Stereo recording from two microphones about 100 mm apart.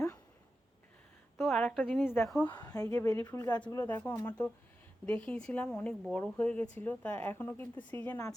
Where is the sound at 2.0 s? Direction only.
25° left (ahead or behind).